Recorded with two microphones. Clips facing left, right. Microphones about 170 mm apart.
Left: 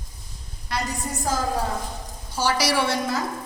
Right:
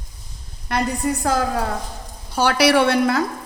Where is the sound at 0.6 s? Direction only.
60° right (ahead or behind).